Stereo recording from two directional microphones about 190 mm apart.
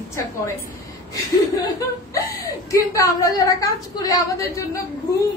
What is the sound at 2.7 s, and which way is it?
A woman's voice, 15° left (ahead or behind).